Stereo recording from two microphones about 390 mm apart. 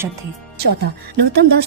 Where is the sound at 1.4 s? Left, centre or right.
Right.